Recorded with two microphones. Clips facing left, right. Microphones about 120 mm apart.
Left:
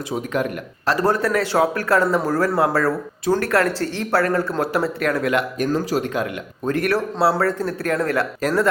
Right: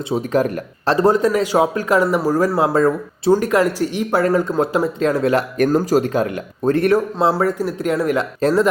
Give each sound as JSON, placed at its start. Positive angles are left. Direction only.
{"t": 0.1, "sound": "speech", "side_deg": -35}
{"t": 0.9, "sound": "a man's voice", "side_deg": -20}
{"t": 5.5, "sound": "speech", "side_deg": -50}
{"t": 6.9, "sound": "a man's voice", "side_deg": -20}